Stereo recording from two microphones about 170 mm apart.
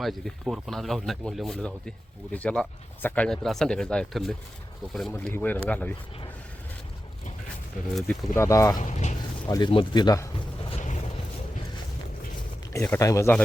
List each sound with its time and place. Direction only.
0.0 s speech: centre (ahead or behind)
8.4 s speech: 20° left (ahead or behind)
8.8 s speech: 45° left (ahead or behind)
9.5 s speech: 25° left (ahead or behind)
10.7 s a sound: 45° left (ahead or behind)
12.7 s speech: 15° left (ahead or behind)